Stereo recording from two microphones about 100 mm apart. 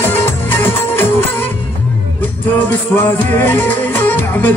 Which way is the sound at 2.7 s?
20° left (ahead or behind).